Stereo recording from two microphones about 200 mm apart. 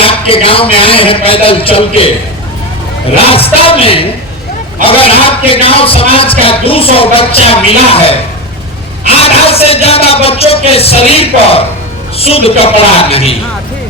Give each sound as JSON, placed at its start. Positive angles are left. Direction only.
{"t": 0.0, "sound": "music", "side_deg": 25}
{"t": 3.2, "sound": "music", "side_deg": 30}
{"t": 9.2, "sound": "music", "side_deg": 30}